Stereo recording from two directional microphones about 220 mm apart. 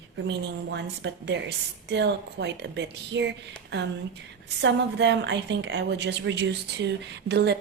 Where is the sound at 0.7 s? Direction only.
55° right (ahead or behind).